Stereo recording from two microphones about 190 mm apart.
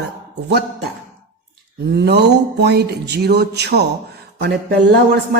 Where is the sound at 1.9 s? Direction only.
60° right (ahead or behind).